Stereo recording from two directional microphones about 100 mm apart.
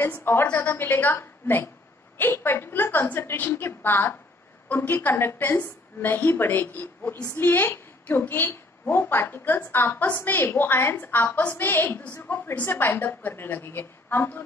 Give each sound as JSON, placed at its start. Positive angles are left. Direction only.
{"t": 0.0, "sound": "a woman's voice", "side_deg": 20}